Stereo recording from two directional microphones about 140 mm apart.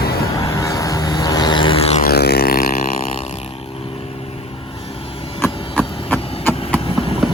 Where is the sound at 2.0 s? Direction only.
90° left.